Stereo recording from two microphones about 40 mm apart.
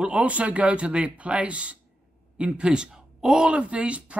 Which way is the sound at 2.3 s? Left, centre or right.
Right.